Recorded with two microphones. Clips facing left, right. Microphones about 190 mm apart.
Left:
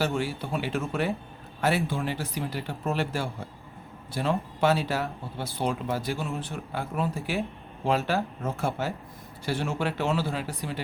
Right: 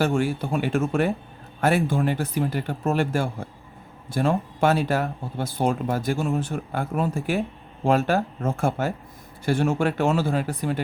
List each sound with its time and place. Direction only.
0.0 s speech: 50° right (ahead or behind)